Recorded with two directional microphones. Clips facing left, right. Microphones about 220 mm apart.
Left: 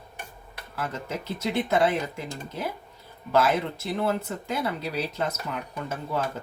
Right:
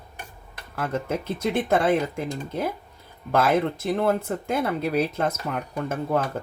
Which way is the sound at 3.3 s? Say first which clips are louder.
Right 2 dB; 50° right (ahead or behind).